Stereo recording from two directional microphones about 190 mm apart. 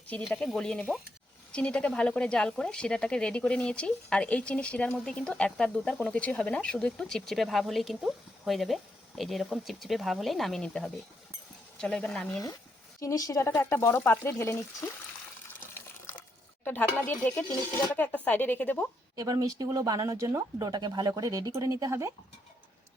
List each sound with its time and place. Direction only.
0.1 s speech: 5° left (ahead or behind)
13.0 s speech: 20° left (ahead or behind)
15.7 s water: 10° left (ahead or behind)
16.6 s speech: 10° left (ahead or behind)
19.1 s speech: 20° right (ahead or behind)